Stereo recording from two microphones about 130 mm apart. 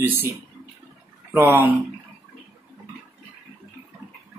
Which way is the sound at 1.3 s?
15° right (ahead or behind).